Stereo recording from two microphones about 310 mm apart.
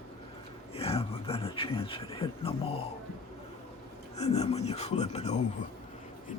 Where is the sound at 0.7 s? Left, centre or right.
Centre.